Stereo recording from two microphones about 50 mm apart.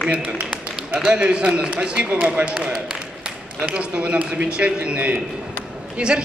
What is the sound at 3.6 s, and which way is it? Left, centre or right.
A man's voice, right.